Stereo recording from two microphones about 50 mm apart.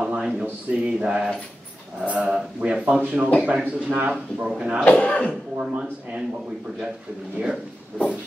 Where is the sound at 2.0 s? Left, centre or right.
Right.